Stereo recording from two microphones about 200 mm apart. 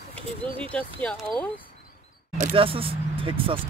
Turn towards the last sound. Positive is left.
turn(degrees=-25)  # may be behind; listen again after turning